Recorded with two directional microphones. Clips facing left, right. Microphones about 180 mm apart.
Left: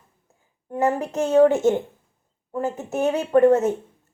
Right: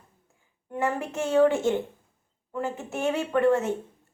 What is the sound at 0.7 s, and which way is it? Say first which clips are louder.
A woman's voice: left 6 dB; 40° left (ahead or behind).